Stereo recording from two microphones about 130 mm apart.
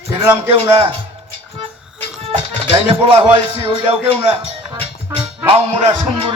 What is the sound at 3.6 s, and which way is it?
Music, 45° right (ahead or behind).